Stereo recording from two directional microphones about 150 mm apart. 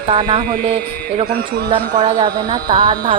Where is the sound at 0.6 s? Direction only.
40° right (ahead or behind).